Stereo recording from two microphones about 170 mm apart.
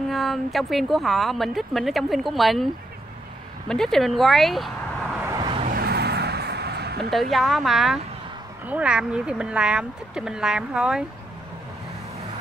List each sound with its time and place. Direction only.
0.1 s speech: centre (ahead or behind)
5.2 s vehicle: 25° right (ahead or behind)
5.7 s vehicle: 65° right (ahead or behind)
7.1 s speech: centre (ahead or behind)